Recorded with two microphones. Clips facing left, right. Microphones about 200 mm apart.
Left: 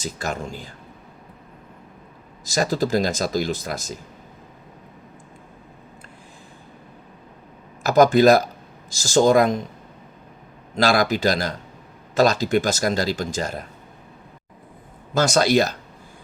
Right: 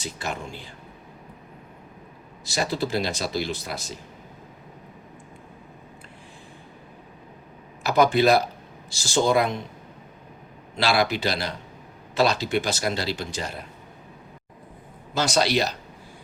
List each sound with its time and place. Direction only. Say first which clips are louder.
0.0 s speech: left 4 dB; 45° left (ahead or behind)
2.4 s speech: left 5 dB; 45° left (ahead or behind)
7.9 s speech: left 5 dB; 45° left (ahead or behind)
10.8 s speech: left 4 dB; 45° left (ahead or behind)
15.1 s speech: left 5 dB; 45° left (ahead or behind)